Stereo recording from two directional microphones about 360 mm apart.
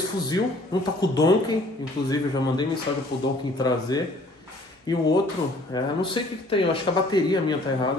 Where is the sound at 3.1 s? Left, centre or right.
Left.